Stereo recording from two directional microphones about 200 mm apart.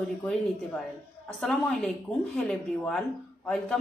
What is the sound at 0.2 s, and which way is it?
A woman's voice, 5° left (ahead or behind).